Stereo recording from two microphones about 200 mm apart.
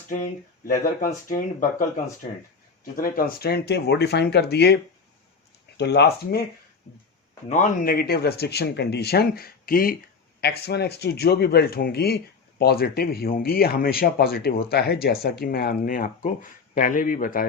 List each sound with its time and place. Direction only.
1.3 s speech: 40° left (ahead or behind)
7.5 s speech: 40° left (ahead or behind)